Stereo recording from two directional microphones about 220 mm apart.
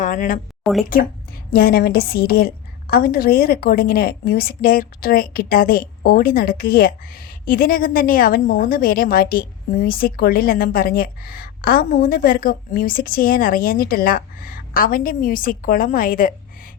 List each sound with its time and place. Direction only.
0.0 s speech: 35° left (ahead or behind)
0.6 s speech: centre (ahead or behind)
1.5 s a woman's voice: 45° left (ahead or behind)